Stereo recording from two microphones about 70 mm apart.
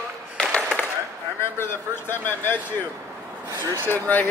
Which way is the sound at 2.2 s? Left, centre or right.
Left.